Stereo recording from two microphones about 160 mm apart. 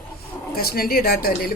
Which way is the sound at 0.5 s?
70° left (ahead or behind).